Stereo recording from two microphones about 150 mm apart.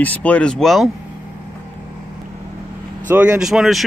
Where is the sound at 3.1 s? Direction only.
10° right (ahead or behind).